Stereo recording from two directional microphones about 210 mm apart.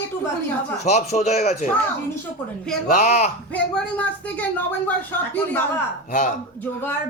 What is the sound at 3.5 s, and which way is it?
Speech, 5° left (ahead or behind).